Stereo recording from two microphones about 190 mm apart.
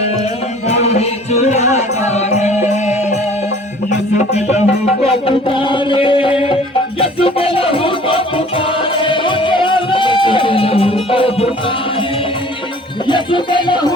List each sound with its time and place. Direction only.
0.7 s music: 35° left (ahead or behind)
4.2 s music: 35° left (ahead or behind)
13.1 s music: 25° left (ahead or behind)